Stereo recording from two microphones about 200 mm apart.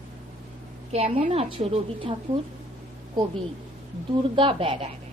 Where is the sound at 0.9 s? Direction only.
30° right (ahead or behind).